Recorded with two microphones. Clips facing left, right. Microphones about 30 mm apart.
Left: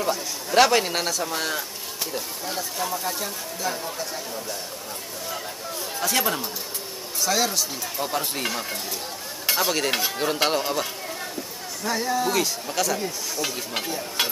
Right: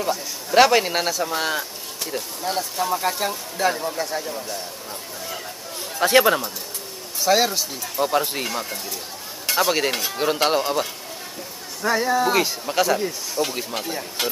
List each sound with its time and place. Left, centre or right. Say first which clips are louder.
0.0 s a man's voice: right 1 dB; centre
3.0 s speech: right 6 dB; right
3.7 s speech: right 4 dB; centre
5.9 s speech: right 9 dB; right
7.2 s speech: right 5 dB; centre
9.5 s speech: right 3 dB; centre
11.8 s speech: right 5 dB; centre